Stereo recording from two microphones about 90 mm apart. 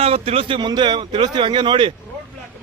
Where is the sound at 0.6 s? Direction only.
55° right (ahead or behind).